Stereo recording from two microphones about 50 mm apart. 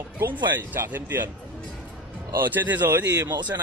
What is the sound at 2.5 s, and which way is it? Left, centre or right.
Speech, right.